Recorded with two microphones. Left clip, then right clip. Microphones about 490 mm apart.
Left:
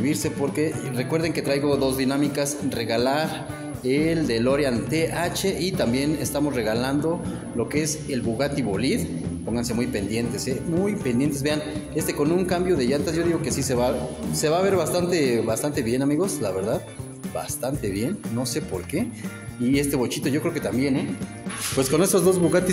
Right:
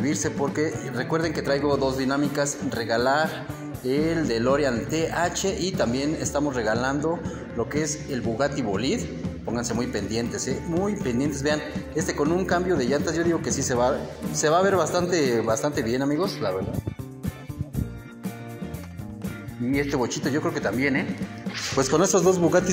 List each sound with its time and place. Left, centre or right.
0.0 s a man's voice: left
19.7 s a man's voice: left
21.7 s a man's voice: left